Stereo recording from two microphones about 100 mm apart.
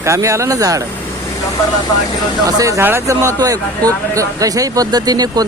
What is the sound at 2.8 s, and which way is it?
Speech, 25° right (ahead or behind).